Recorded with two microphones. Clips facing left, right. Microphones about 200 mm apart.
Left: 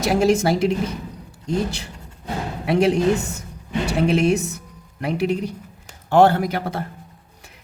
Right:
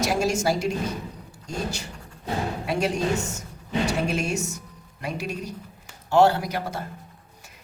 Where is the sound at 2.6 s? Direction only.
60° left (ahead or behind).